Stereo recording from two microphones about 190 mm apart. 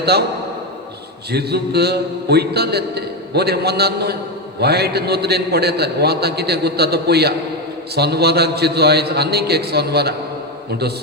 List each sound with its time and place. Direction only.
0.0 s a man's voice: 60° right (ahead or behind)
1.3 s a man's voice: 60° right (ahead or behind)